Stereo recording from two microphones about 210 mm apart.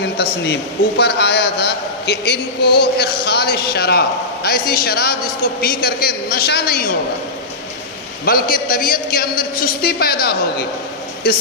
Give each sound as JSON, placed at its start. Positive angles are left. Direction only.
{"t": 0.0, "sound": "a man's voice", "side_deg": 55}
{"t": 8.2, "sound": "a man's voice", "side_deg": 45}